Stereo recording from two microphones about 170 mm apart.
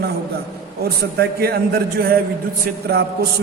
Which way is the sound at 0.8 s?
70° right (ahead or behind).